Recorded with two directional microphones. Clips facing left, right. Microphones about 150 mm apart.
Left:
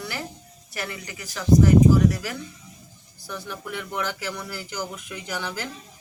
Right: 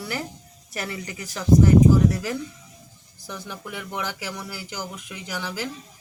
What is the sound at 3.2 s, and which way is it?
Speech, 15° right (ahead or behind).